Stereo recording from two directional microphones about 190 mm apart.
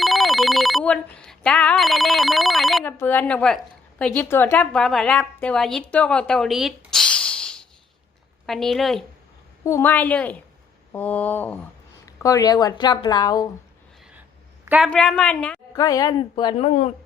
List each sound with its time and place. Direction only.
0.0 s a woman's voice: centre (ahead or behind)
9.6 s a woman's voice: 10° left (ahead or behind)
14.6 s a sound: 10° right (ahead or behind)
14.8 s a woman's voice: 5° left (ahead or behind)
15.7 s speech: 20° left (ahead or behind); by 16.9 s 35° left (ahead or behind)